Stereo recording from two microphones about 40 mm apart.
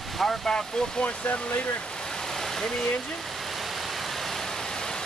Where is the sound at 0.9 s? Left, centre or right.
Left.